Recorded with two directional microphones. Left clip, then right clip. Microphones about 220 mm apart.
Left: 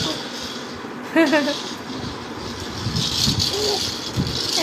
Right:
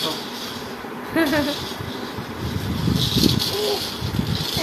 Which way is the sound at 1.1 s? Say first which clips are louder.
Left 4 dB; 15° left (ahead or behind).